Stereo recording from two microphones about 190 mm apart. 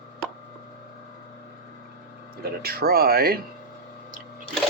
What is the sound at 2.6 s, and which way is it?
Speech, 55° right (ahead or behind).